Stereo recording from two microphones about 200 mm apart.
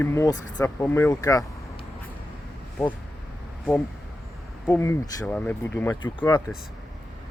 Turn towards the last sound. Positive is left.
turn(degrees=20)  # may be behind; listen again after turning